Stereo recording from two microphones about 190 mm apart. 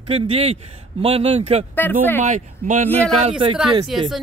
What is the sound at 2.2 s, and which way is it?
Speech, 40° right (ahead or behind).